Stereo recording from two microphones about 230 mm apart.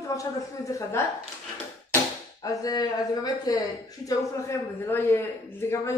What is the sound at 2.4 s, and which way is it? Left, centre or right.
Speech, centre.